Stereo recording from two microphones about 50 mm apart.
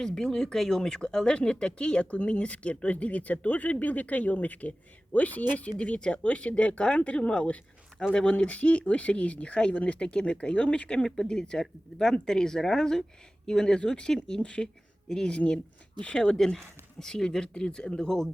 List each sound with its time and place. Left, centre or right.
0.0 s speech: centre; by 5.7 s left
5.7 s speech: centre